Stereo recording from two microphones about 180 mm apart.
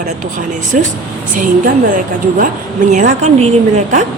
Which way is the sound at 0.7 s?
50° right (ahead or behind).